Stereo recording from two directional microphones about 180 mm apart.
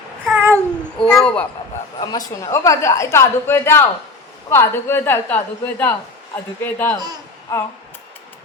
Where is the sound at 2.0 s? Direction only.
20° left (ahead or behind).